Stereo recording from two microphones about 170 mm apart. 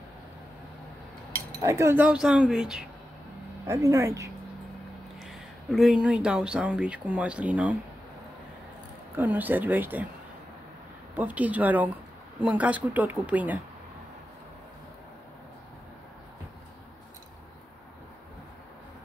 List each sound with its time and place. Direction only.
1.6 s speech: 20° right (ahead or behind)
3.6 s speech: 20° right (ahead or behind)
5.2 s speech: centre (ahead or behind)
9.1 s speech: 10° right (ahead or behind)
11.1 s speech: 10° right (ahead or behind)